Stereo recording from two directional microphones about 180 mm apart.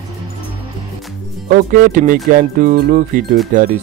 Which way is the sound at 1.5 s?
45° right (ahead or behind).